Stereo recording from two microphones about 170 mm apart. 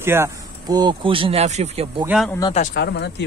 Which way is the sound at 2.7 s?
80° left.